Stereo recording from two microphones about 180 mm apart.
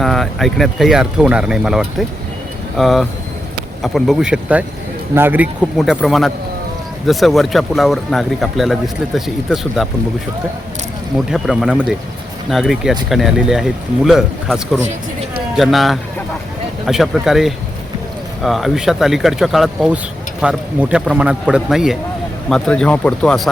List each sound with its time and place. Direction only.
0.0 s speech: centre (ahead or behind)
11.3 s speech: centre (ahead or behind)